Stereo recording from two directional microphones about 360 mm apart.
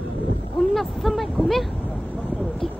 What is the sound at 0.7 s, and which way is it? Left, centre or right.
Speech, centre.